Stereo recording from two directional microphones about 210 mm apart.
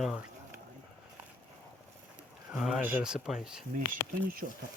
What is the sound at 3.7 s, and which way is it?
Speech, 40° right (ahead or behind).